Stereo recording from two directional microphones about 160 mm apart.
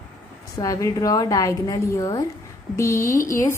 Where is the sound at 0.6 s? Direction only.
20° left (ahead or behind).